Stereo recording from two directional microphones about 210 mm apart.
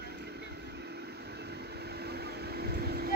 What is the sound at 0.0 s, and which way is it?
Vehicle, 50° right (ahead or behind).